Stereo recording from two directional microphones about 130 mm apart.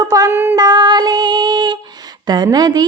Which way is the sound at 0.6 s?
30° right (ahead or behind).